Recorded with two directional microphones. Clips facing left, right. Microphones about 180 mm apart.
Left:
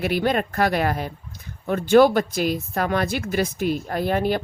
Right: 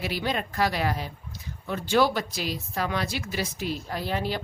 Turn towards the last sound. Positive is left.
turn(degrees=55)  # may be behind; listen again after turning